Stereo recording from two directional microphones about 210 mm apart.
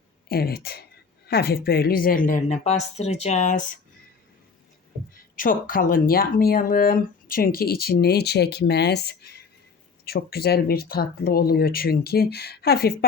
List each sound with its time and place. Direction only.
0.3 s a woman's voice: 45° left (ahead or behind)
5.4 s speech: 40° left (ahead or behind)